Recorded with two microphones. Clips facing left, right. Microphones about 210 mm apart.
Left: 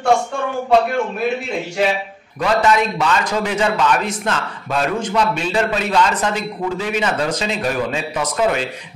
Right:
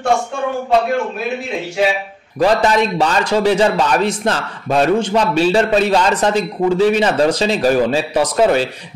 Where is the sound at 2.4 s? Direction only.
35° right (ahead or behind).